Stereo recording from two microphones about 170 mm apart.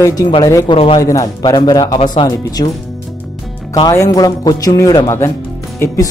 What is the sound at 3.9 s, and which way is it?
Speech, 20° left (ahead or behind).